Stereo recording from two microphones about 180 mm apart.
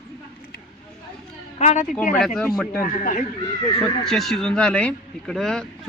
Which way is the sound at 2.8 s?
45° left (ahead or behind).